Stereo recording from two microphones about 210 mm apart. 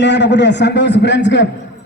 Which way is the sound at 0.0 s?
55° left (ahead or behind).